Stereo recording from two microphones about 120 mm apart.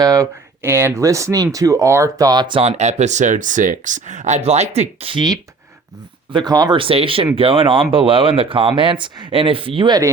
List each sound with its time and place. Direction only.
0.0 s speech: 25° right (ahead or behind)
2.6 s speech: 65° right (ahead or behind)
6.3 s speech: 35° right (ahead or behind)